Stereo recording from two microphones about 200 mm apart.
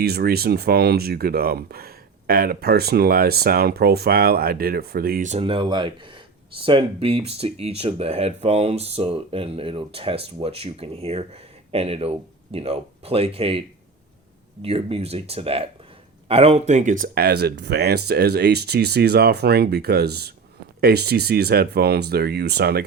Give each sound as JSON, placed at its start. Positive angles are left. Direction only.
{"t": 0.0, "sound": "speech", "side_deg": -50}